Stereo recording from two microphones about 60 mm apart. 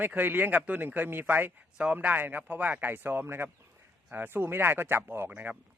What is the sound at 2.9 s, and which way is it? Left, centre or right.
Speech, right.